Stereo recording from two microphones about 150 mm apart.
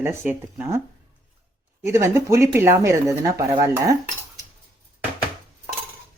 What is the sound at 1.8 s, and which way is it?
Speech, 20° right (ahead or behind).